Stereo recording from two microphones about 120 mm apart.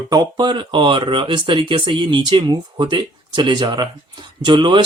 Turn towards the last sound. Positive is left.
turn(degrees=-40)  # may be behind; listen again after turning